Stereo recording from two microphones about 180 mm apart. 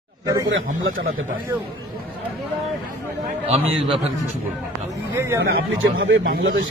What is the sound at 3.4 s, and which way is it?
Speech, 30° right (ahead or behind).